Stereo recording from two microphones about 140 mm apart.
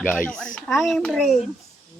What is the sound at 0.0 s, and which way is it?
A child's voice, 10° left (ahead or behind).